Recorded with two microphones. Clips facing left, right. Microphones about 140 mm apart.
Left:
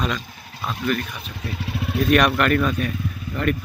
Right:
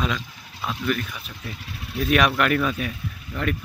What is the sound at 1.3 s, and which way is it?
Speech, 75° left (ahead or behind).